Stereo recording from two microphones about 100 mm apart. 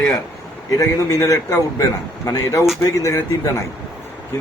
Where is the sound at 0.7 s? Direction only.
35° left (ahead or behind).